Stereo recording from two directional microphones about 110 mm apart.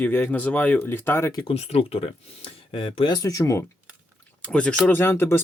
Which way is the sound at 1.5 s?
75° left (ahead or behind).